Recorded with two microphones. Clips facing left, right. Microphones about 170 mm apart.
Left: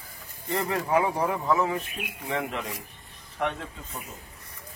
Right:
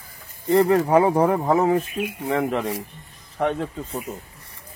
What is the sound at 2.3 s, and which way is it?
Speech, 35° right (ahead or behind).